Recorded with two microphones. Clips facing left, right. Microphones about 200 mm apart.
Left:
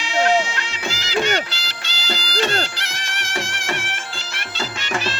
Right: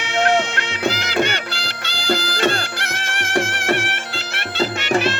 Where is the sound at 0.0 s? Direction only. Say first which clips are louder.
Even; 55° right (ahead or behind).